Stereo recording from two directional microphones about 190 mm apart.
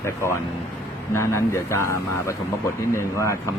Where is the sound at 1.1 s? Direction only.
15° left (ahead or behind).